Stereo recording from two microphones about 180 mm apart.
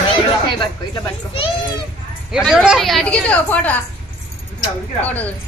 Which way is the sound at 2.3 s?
5° right (ahead or behind).